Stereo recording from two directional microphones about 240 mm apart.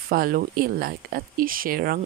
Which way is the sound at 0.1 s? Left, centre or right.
Right.